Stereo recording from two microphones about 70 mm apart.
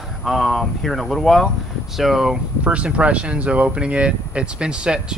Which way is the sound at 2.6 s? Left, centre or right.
Centre.